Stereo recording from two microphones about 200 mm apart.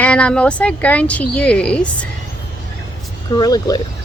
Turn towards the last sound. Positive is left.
turn(degrees=20)  # may be behind; listen again after turning